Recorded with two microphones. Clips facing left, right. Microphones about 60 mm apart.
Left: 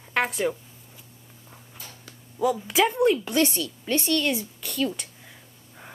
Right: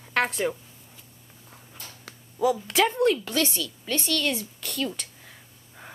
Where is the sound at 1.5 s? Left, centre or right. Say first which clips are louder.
Even; centre.